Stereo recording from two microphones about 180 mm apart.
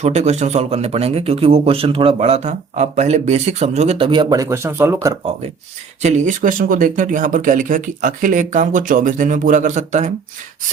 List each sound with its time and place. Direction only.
0.0 s speech: 40° right (ahead or behind); by 5.1 s 15° right (ahead or behind)
6.0 s speech: 40° right (ahead or behind)